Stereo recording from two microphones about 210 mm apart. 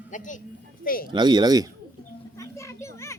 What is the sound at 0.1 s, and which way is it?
Speech, 35° left (ahead or behind).